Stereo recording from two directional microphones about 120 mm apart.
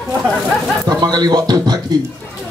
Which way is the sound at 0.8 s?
35° right (ahead or behind).